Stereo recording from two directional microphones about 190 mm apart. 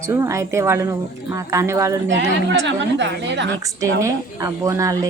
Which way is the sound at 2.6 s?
70° right (ahead or behind).